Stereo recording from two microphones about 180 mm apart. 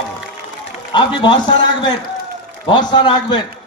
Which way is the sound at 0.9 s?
25° left (ahead or behind).